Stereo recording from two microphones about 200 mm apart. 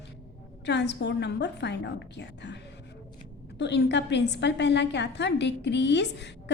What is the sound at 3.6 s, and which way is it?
A woman's voice, 60° left (ahead or behind).